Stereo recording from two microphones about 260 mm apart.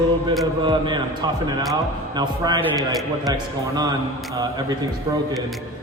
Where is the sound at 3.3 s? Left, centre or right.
Centre.